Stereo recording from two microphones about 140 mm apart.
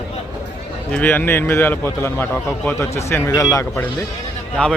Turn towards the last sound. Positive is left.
turn(degrees=10)  # may be behind; listen again after turning